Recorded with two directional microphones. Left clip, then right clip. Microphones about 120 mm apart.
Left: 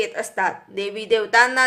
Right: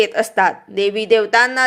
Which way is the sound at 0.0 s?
45° right (ahead or behind).